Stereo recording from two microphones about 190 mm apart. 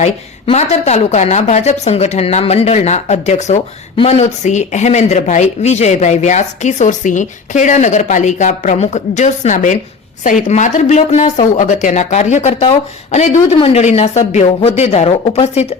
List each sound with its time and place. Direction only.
0.0 s a woman's voice: 35° left (ahead or behind)